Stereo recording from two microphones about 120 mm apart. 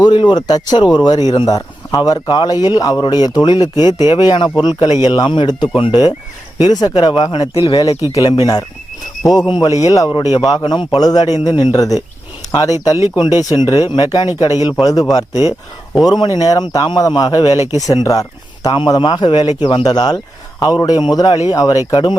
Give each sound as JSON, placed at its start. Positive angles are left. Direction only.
{"t": 0.0, "sound": "speech", "side_deg": 40}
{"t": 18.7, "sound": "speech", "side_deg": 40}